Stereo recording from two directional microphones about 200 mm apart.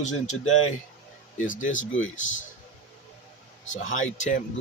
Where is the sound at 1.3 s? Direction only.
40° left (ahead or behind).